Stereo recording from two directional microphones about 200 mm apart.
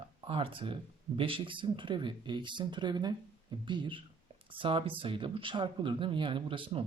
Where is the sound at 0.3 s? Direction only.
25° right (ahead or behind).